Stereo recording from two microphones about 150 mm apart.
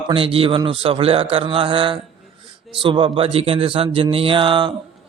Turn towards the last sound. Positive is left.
turn(degrees=-30)  # may be behind; listen again after turning